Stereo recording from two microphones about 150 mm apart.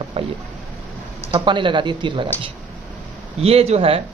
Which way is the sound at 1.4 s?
30° right (ahead or behind).